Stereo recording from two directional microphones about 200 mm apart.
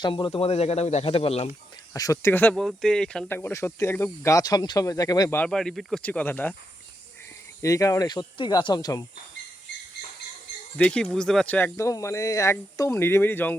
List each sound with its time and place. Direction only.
0.0 s speech: 20° left (ahead or behind)
1.9 s speech: 15° left (ahead or behind)
5.4 s speech: 5° left (ahead or behind)
7.6 s speech: 15° left (ahead or behind)
10.8 s speech: 5° left (ahead or behind)